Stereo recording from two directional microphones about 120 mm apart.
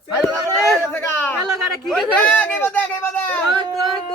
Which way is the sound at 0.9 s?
15° left (ahead or behind).